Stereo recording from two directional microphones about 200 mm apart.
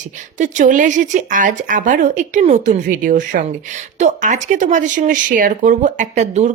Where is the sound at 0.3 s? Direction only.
35° right (ahead or behind).